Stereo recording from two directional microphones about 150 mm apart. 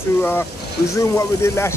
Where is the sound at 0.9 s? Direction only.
20° left (ahead or behind).